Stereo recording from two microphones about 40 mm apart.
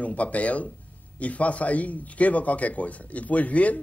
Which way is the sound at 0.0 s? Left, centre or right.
Left.